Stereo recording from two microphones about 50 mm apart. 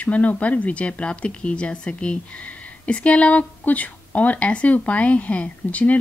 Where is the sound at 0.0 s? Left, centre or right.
Left.